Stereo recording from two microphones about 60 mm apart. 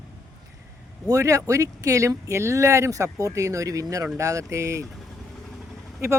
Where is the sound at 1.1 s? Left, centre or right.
Right.